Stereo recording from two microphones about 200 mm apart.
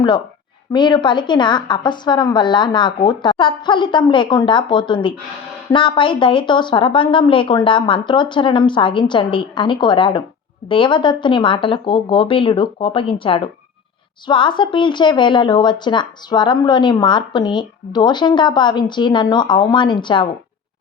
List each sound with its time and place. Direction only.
0.7 s a woman's voice: 20° left (ahead or behind)